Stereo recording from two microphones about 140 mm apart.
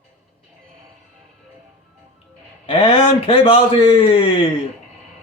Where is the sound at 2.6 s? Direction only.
40° left (ahead or behind).